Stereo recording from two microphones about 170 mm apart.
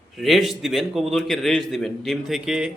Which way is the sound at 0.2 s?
Centre (ahead or behind).